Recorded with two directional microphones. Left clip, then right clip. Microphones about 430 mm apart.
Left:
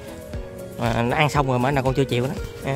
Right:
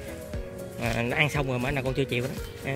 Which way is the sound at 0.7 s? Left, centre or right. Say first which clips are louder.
Left 5 dB; centre.